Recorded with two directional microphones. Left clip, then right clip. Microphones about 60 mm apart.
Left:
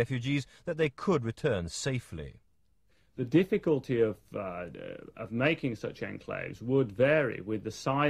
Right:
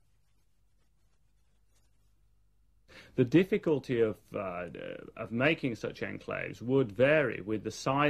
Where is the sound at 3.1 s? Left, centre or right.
Right.